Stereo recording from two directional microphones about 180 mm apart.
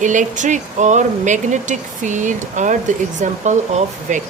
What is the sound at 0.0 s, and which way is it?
Speech, 45° right (ahead or behind).